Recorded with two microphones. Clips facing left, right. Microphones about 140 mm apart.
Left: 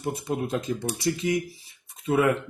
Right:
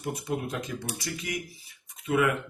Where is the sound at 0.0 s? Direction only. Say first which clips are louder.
Left 3 dB; 25° left (ahead or behind).